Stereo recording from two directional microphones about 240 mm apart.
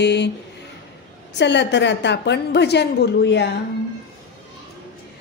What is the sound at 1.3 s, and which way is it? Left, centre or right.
A woman's voice, left.